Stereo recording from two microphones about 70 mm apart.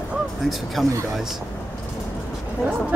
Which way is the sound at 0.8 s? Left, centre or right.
Centre.